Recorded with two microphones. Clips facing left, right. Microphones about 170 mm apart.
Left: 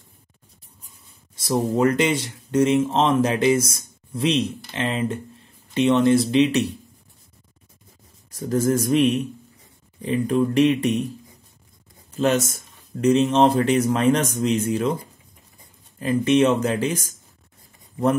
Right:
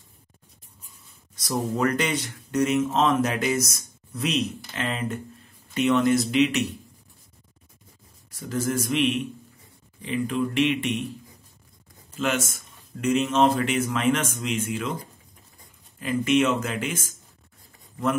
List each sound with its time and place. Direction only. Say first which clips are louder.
1.3 s speech: left 5 dB; 30° left (ahead or behind)
8.3 s speech: left 7 dB; 40° left (ahead or behind)
12.2 s speech: left 6 dB; 40° left (ahead or behind)
16.0 s speech: left 4 dB; 35° left (ahead or behind)